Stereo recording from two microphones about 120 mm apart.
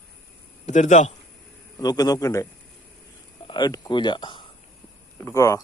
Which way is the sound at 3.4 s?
40° left (ahead or behind).